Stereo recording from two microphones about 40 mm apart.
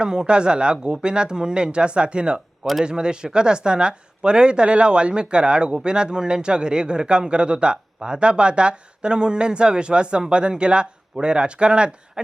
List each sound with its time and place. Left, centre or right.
0.0 s speech: right